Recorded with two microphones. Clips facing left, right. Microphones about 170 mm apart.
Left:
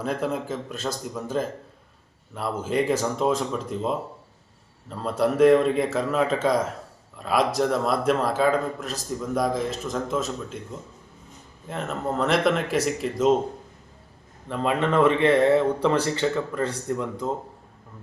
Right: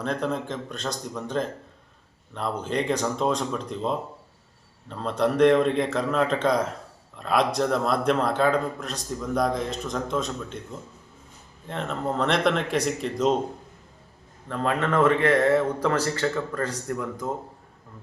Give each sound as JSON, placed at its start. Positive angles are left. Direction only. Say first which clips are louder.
{"t": 0.0, "sound": "speech", "louder": "left 1 dB", "side_deg": 5}
{"t": 11.7, "sound": "speech", "louder": "even", "side_deg": 5}
{"t": 14.6, "sound": "speech", "louder": "left 2 dB", "side_deg": 20}
{"t": 16.6, "sound": "speech", "louder": "left 2 dB", "side_deg": 25}